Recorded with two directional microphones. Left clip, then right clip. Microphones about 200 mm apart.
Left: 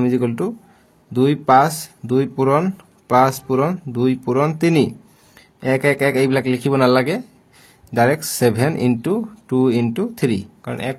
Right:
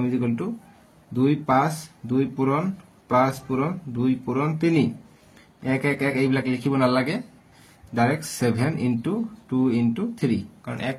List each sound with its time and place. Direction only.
0.0 s speech: 45° left (ahead or behind)